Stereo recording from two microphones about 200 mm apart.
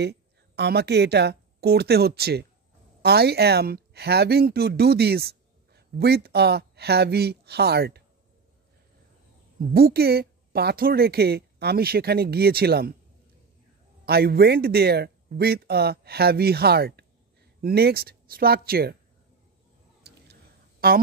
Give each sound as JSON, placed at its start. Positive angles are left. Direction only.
{"t": 0.0, "sound": "speech", "side_deg": -55}
{"t": 9.6, "sound": "speech", "side_deg": -50}
{"t": 14.0, "sound": "speech", "side_deg": -50}
{"t": 20.8, "sound": "speech", "side_deg": -50}